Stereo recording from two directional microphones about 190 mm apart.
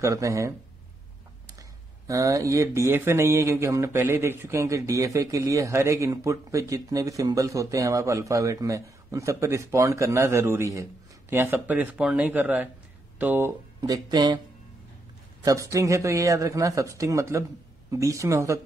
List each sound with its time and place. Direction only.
0.0 s speech: 15° right (ahead or behind)
13.7 s speech: 20° right (ahead or behind)
15.4 s speech: 15° right (ahead or behind)